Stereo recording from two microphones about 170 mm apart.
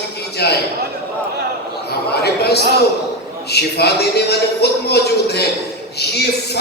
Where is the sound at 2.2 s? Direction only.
75° left (ahead or behind).